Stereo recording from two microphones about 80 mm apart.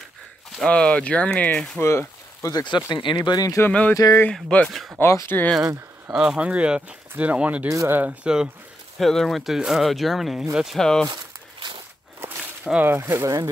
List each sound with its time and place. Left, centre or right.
0.7 s speech: centre
1.8 s speech: left
2.9 s speech: left
3.3 s speech: left
4.3 s speech: centre
5.0 s speech: left
5.6 s speech: right
6.1 s speech: centre
7.6 s speech: right
7.9 s speech: centre
9.0 s speech: centre
10.8 s speech: centre
12.7 s speech: right